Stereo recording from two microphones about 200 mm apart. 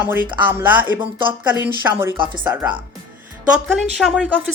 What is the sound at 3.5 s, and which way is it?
Speech, centre (ahead or behind).